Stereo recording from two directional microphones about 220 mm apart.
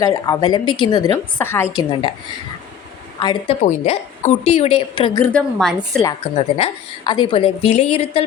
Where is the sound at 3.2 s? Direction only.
25° left (ahead or behind).